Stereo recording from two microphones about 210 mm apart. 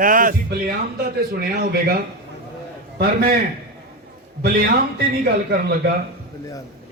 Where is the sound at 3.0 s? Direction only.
45° right (ahead or behind).